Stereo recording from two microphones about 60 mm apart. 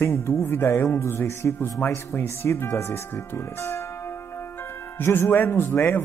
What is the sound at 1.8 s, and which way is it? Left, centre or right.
A man's voice, left.